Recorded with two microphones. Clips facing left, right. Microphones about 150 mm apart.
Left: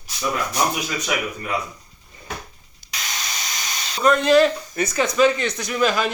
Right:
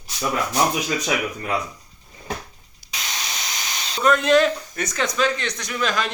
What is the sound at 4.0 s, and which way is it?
Speech, centre (ahead or behind).